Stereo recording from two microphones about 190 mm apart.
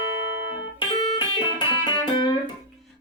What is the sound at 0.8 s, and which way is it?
Music, 25° left (ahead or behind).